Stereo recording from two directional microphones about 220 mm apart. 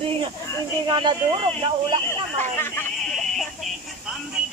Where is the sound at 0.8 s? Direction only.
20° right (ahead or behind).